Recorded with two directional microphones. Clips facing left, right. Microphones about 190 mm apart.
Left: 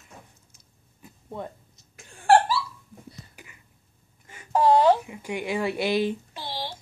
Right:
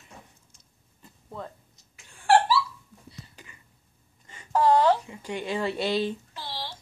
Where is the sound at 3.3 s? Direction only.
10° left (ahead or behind).